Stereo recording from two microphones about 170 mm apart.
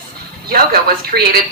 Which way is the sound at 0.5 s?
65° right (ahead or behind).